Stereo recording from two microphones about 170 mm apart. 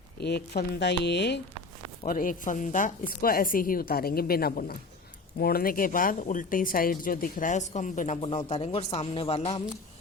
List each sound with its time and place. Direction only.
0.2 s speech: 75° left (ahead or behind); by 1.4 s 90° left
2.0 s a woman's voice: 55° left (ahead or behind); by 9.6 s 35° left (ahead or behind)